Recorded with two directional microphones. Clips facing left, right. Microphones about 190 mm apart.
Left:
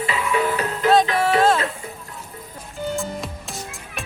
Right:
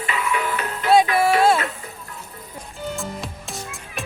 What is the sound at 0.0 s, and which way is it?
Music, 35° left (ahead or behind).